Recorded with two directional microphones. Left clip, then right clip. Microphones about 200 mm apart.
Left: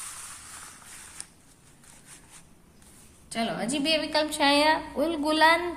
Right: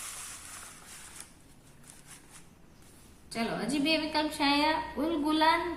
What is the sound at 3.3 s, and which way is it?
A woman's voice, 40° left (ahead or behind).